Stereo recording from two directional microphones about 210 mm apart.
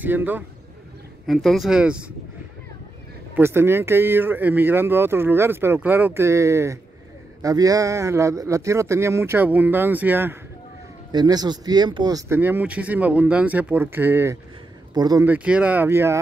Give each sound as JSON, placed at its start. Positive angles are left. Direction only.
{"t": 0.0, "sound": "speech", "side_deg": -10}
{"t": 3.3, "sound": "speech", "side_deg": -10}
{"t": 11.1, "sound": "speech", "side_deg": -20}
{"t": 15.2, "sound": "speech", "side_deg": -5}